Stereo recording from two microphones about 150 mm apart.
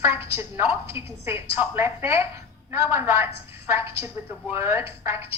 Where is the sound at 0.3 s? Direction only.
15° right (ahead or behind).